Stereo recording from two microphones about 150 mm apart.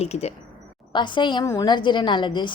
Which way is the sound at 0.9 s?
30° left (ahead or behind).